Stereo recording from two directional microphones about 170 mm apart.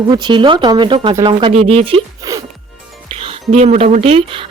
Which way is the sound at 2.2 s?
20° right (ahead or behind).